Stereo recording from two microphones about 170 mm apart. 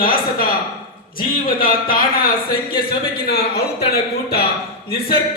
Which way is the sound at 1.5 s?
60° left (ahead or behind).